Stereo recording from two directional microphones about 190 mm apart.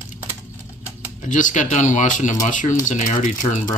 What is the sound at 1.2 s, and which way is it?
Speech, 40° left (ahead or behind).